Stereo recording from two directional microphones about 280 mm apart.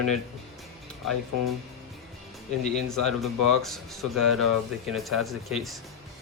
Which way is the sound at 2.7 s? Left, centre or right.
Centre.